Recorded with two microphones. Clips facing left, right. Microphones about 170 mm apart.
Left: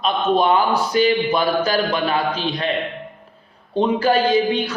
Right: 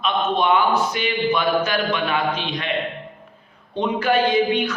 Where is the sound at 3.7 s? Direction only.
35° left (ahead or behind).